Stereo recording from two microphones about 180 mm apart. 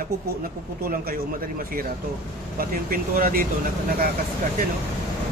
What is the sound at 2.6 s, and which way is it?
Speech, 50° right (ahead or behind).